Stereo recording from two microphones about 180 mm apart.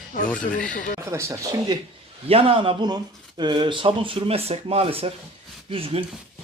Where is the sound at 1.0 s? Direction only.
15° right (ahead or behind).